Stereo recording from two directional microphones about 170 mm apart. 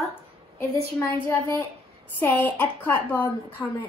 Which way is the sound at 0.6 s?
15° left (ahead or behind).